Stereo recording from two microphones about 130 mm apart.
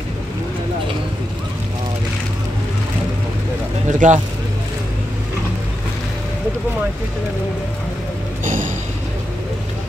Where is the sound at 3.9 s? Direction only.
75° right (ahead or behind).